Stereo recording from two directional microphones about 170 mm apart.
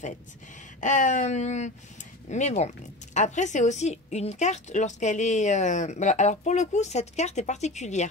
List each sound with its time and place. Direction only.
0.7 s a woman's voice: 45° left (ahead or behind)